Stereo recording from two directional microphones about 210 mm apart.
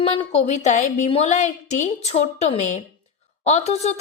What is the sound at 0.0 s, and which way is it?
A woman's voice, 25° left (ahead or behind).